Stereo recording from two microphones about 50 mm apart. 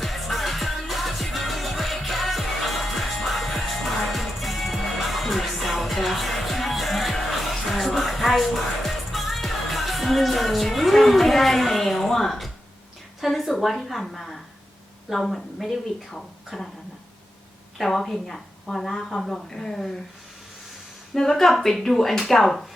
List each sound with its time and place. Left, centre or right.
0.0 s music: centre
13.2 s speech: centre
17.7 s a woman's voice: centre
21.2 s speech: centre